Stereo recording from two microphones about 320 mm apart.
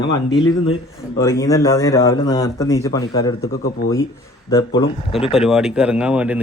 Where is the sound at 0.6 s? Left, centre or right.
Centre.